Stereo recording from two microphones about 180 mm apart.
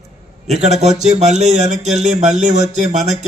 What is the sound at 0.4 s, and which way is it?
Speech, 40° right (ahead or behind).